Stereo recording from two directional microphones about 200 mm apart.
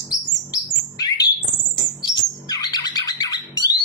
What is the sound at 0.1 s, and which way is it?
Bird, 20° left (ahead or behind).